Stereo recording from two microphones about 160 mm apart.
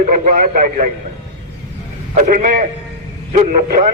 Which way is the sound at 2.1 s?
55° right (ahead or behind).